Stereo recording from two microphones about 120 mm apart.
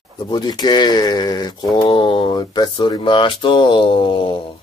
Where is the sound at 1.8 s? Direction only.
50° left (ahead or behind).